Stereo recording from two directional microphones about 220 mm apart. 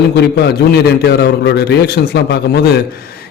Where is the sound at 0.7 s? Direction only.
45° left (ahead or behind).